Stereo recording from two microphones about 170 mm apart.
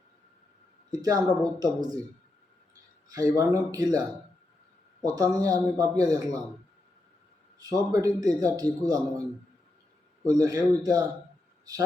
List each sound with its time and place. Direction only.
0.9 s a woman's voice: 20° right (ahead or behind)
3.1 s a man's voice: 20° right (ahead or behind)
5.0 s a man's voice: 20° right (ahead or behind)
7.6 s a man's voice: 25° right (ahead or behind)
10.2 s a man's voice: 20° right (ahead or behind)